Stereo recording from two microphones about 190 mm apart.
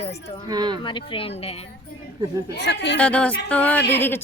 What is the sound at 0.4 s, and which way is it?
Speech, 20° right (ahead or behind).